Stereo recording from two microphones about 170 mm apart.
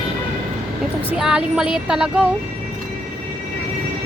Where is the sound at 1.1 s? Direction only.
5° right (ahead or behind).